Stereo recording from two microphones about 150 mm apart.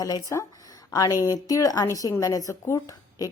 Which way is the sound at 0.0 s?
20° left (ahead or behind).